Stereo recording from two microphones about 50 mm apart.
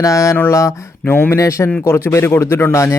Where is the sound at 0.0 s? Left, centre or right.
Left.